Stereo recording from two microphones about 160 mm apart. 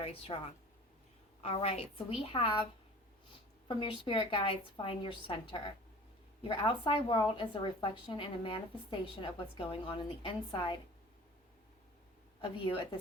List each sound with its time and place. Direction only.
0.0 s a woman's voice: 40° left (ahead or behind)
3.7 s a woman's voice: 30° left (ahead or behind)
12.4 s a woman's voice: 30° left (ahead or behind)